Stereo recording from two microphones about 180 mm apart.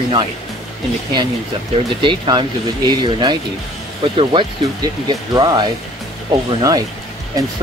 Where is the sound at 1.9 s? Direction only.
25° right (ahead or behind).